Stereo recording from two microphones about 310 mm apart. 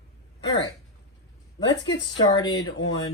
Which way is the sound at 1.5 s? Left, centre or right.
Centre.